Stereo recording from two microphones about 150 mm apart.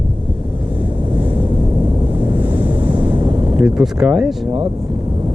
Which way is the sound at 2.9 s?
30° right (ahead or behind).